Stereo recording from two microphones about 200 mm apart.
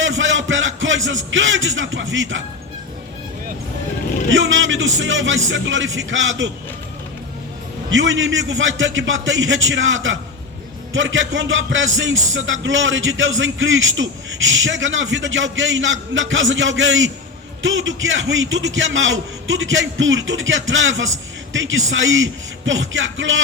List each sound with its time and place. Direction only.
0.0 s speech: 65° right (ahead or behind)
4.3 s music: 70° right (ahead or behind)
7.9 s music: 70° right (ahead or behind)